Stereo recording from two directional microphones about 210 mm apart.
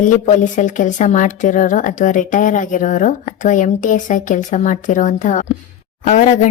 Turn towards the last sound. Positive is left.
turn(degrees=35)  # may be behind; listen again after turning